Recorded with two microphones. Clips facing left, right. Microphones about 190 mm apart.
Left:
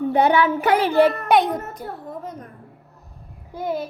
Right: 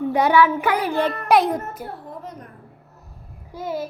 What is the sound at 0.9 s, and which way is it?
Speech, 10° left (ahead or behind).